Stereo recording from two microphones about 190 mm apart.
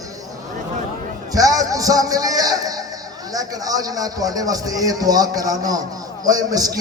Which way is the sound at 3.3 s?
20° right (ahead or behind).